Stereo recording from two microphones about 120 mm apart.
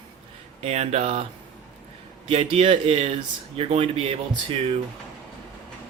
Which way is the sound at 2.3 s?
55° right (ahead or behind).